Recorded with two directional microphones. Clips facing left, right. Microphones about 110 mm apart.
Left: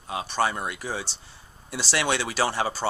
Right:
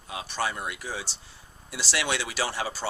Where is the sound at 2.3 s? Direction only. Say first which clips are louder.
Left 5 dB; 50° left (ahead or behind).